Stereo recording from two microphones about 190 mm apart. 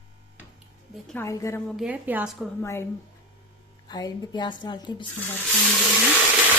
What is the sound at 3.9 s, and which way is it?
A woman's voice, 20° left (ahead or behind).